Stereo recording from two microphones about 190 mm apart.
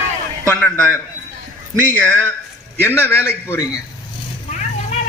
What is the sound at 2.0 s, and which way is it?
A man's voice, 10° left (ahead or behind).